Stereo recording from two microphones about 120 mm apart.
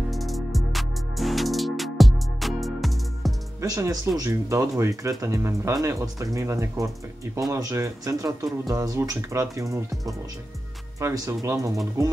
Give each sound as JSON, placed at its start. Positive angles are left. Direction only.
{"t": 0.1, "sound": "music", "side_deg": 0}
{"t": 3.6, "sound": "speech", "side_deg": -30}